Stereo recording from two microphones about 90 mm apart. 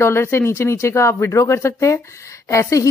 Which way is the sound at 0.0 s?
30° left (ahead or behind).